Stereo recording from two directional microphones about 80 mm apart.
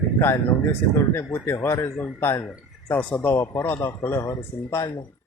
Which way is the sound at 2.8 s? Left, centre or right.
Centre.